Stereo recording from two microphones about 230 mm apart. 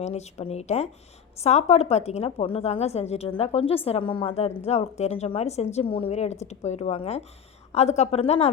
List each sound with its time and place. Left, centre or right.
0.0 s a woman's voice: left